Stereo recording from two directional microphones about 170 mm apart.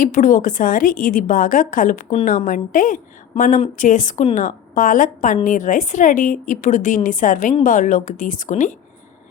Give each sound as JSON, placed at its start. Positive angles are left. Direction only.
{"t": 0.0, "sound": "a woman's voice", "side_deg": 50}